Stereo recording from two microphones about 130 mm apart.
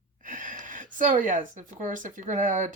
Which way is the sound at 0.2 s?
90° right.